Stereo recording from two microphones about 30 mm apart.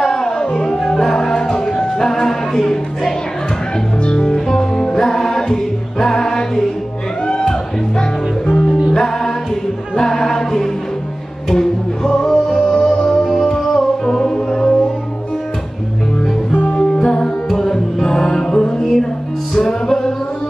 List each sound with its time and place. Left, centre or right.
0.0 s music: centre
0.4 s music: left
0.8 s music: centre
4.0 s music: left
7.2 s music: left
8.9 s music: centre
9.9 s choir: centre
11.5 s music: centre
12.7 s music: left
13.1 s music: centre
16.7 s music: left
18.8 s music: centre
19.5 s music: centre
19.9 s tabla: centre